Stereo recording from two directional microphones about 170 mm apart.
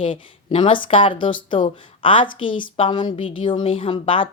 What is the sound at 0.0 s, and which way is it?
Speech, 30° left (ahead or behind).